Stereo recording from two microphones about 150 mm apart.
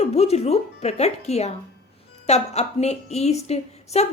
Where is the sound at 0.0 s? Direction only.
45° left (ahead or behind).